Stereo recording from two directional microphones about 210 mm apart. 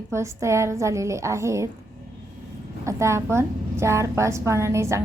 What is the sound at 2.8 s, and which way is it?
A woman's voice, 15° right (ahead or behind).